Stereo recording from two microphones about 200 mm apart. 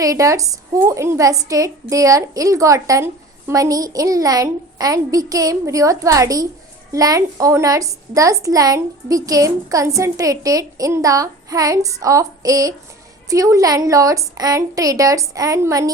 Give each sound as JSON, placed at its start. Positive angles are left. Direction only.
{"t": 0.0, "sound": "a woman's voice", "side_deg": -15}